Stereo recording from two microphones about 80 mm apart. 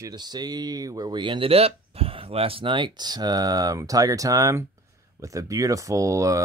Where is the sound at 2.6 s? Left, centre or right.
Right.